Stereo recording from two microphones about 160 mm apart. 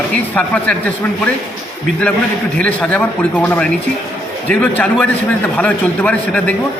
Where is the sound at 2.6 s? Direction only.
10° left (ahead or behind).